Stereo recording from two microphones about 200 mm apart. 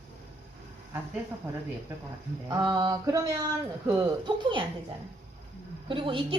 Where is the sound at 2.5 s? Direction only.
20° right (ahead or behind).